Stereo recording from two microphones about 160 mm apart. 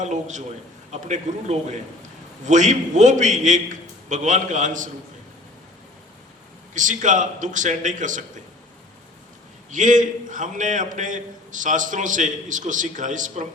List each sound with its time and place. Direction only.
0.0 s a man's voice: 50° right (ahead or behind)
6.7 s a man's voice: 55° right (ahead or behind)
9.7 s a man's voice: 55° right (ahead or behind)